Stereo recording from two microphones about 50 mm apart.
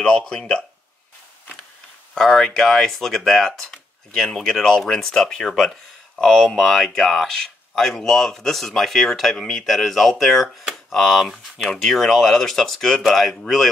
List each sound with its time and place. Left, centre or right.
0.3 s speech: centre
2.1 s speech: centre